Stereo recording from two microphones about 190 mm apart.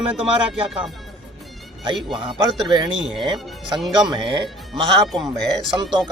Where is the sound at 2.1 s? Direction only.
25° right (ahead or behind).